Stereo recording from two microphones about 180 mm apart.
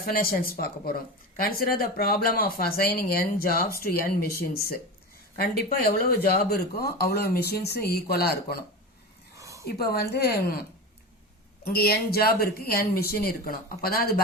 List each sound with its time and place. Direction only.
0.0 s speech: 55° left (ahead or behind)
9.3 s a sound: 15° right (ahead or behind)
9.6 s speech: 60° left (ahead or behind)